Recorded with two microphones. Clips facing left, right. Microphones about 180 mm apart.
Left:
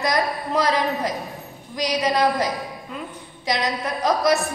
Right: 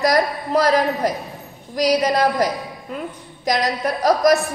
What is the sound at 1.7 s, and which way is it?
A woman's voice, 40° right (ahead or behind).